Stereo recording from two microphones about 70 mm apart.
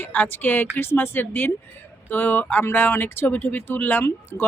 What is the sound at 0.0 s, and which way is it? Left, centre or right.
A woman's voice, left.